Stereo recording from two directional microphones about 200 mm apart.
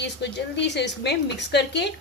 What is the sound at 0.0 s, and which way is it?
A woman's voice, 60° left (ahead or behind).